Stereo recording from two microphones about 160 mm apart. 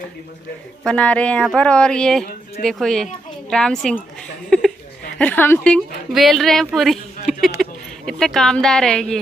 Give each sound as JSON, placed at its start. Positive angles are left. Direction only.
{"t": 0.8, "sound": "a woman's voice", "side_deg": 10}
{"t": 4.5, "sound": "a sound", "side_deg": 0}
{"t": 5.2, "sound": "a woman's voice", "side_deg": 10}